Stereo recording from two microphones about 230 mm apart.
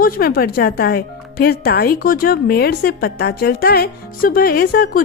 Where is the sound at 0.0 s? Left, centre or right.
Left.